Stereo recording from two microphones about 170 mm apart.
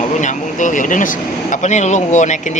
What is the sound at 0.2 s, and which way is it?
Speech, 45° left (ahead or behind).